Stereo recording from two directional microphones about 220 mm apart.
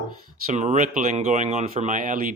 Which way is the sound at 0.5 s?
35° right (ahead or behind).